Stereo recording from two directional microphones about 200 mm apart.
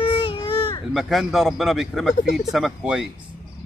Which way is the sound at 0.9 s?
Centre (ahead or behind).